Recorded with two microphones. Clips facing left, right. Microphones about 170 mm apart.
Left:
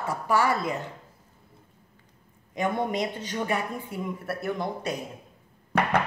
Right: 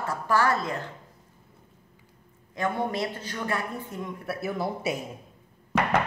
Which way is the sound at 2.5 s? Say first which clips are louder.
Left 1 dB; 15° left (ahead or behind).